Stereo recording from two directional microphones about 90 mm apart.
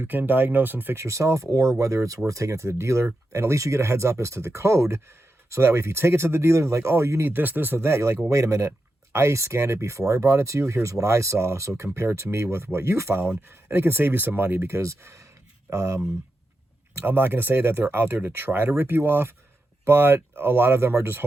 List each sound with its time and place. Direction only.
0.0 s speech: 25° right (ahead or behind)
1.0 s speech: 35° right (ahead or behind)
17.1 s speech: 25° right (ahead or behind)